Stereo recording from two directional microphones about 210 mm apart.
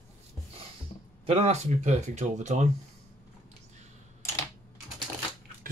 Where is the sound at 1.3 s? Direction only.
30° right (ahead or behind).